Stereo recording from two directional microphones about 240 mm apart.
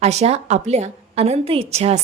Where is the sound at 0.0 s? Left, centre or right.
Right.